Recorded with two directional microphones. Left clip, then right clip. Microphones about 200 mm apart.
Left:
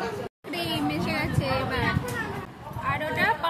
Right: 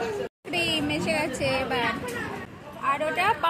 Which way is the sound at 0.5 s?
20° right (ahead or behind).